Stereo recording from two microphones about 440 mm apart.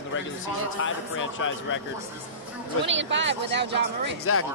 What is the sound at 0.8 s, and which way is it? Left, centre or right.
Speech, left.